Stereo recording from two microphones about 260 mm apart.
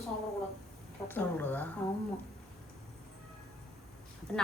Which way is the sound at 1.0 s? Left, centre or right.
Centre.